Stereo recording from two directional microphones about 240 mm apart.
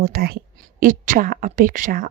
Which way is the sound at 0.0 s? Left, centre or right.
Right.